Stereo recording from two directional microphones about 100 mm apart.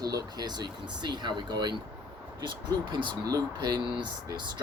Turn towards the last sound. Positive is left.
turn(degrees=-45)  # may be behind; listen again after turning